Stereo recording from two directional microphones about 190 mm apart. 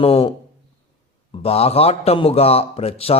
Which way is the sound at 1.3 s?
30° left (ahead or behind).